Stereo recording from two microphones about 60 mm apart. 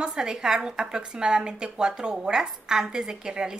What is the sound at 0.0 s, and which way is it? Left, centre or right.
A woman's voice, centre.